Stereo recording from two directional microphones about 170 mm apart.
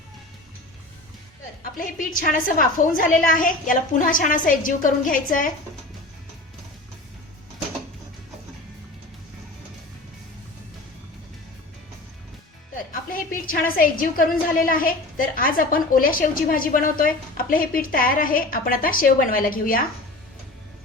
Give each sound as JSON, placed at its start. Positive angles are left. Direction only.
{"t": 1.8, "sound": "a woman's voice", "side_deg": 55}
{"t": 12.7, "sound": "a woman's voice", "side_deg": 55}